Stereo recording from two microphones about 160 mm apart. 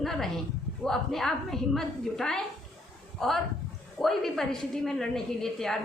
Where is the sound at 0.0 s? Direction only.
Centre (ahead or behind).